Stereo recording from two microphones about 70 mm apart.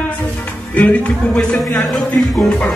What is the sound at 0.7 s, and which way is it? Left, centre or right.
Speech, left.